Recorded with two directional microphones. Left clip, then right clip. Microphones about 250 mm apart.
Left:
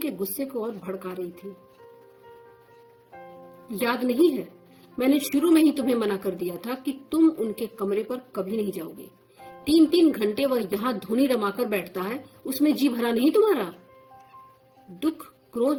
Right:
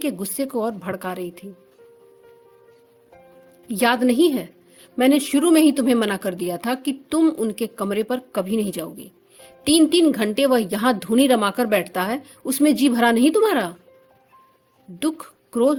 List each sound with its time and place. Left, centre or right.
0.3 s a woman's voice: right
3.8 s a woman's voice: right